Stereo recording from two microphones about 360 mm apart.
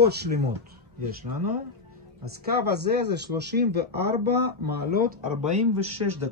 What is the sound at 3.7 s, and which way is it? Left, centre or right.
Speech, right.